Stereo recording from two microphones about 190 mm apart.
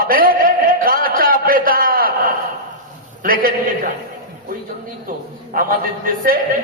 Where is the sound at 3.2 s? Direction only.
50° right (ahead or behind).